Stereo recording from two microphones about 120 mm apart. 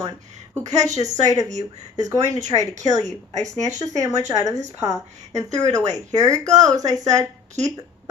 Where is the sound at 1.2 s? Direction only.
30° right (ahead or behind).